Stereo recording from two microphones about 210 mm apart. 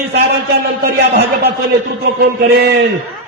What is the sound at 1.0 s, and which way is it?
A man's voice, 55° right (ahead or behind).